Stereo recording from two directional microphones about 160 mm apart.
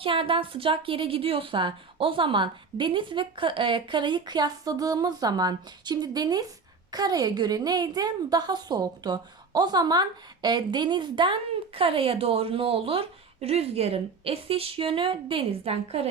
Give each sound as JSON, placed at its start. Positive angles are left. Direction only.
{"t": 0.0, "sound": "a woman's voice", "side_deg": -35}